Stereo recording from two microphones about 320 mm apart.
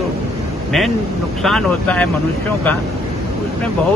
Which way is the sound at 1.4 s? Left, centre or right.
Centre.